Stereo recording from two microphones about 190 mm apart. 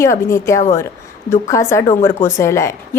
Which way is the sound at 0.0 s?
15° left (ahead or behind).